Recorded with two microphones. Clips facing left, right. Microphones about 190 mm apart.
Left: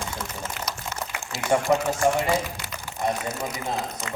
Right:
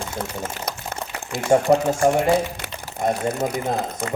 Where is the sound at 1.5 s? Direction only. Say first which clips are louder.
Right 5 dB; 35° right (ahead or behind).